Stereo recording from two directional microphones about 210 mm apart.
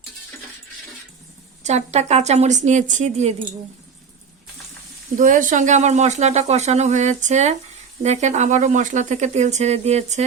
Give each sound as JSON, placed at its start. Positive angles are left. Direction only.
{"t": 1.6, "sound": "speech", "side_deg": -30}
{"t": 5.1, "sound": "speech", "side_deg": -40}